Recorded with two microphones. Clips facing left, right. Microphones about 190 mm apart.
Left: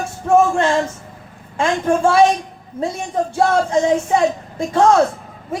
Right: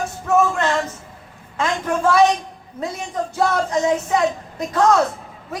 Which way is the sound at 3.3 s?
30° left (ahead or behind).